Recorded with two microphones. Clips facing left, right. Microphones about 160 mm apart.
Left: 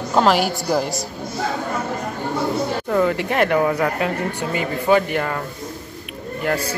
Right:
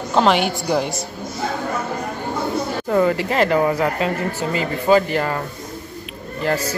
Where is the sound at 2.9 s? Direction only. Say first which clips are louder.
Right 2 dB; 5° right (ahead or behind).